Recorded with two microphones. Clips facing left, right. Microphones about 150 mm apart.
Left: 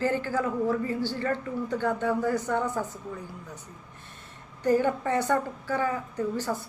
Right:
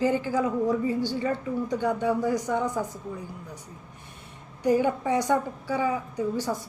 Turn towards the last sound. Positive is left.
turn(degrees=-15)  # may be behind; listen again after turning